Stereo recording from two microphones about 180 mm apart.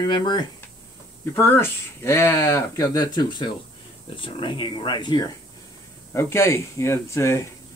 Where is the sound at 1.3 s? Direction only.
10° left (ahead or behind).